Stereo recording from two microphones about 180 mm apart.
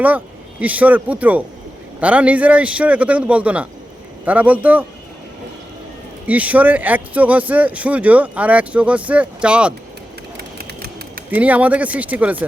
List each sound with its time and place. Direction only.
0.6 s speech: 10° right (ahead or behind)
6.2 s speech: 10° right (ahead or behind)
10.3 s a sound: 65° right (ahead or behind)
11.3 s speech: 10° right (ahead or behind)